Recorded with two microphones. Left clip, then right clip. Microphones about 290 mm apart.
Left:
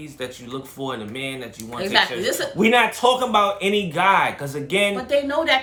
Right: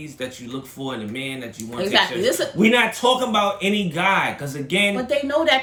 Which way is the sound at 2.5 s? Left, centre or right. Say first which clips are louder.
Left 3 dB; centre.